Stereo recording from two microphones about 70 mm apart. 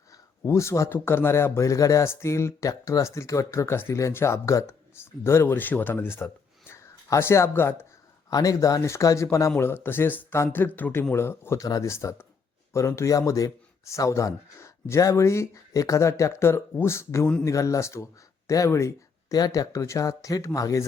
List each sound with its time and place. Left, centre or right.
0.4 s speech: left
0.9 s speech: left
2.0 s speech: left
8.3 s speech: left
9.6 s speech: left
11.6 s speech: left
11.9 s speech: left
19.3 s speech: left